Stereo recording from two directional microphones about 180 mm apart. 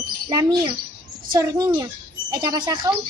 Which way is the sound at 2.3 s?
25° right (ahead or behind).